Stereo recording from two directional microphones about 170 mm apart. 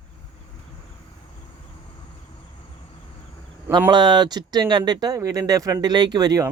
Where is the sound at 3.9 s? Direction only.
25° right (ahead or behind).